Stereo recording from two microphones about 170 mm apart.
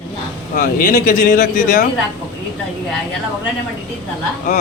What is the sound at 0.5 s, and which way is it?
Speech, 50° left (ahead or behind).